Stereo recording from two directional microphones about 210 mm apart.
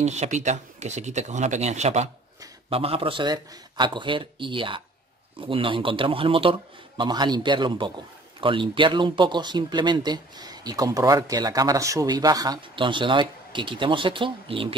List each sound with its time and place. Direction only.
0.0 s speech: 35° right (ahead or behind)